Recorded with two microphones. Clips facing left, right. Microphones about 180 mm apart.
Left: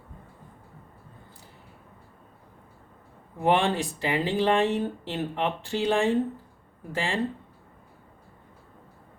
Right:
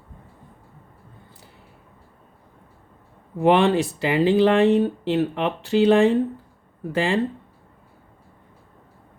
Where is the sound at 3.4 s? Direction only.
75° right (ahead or behind).